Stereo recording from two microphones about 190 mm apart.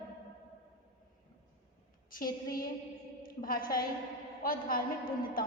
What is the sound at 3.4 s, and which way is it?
A woman's voice, 50° left (ahead or behind).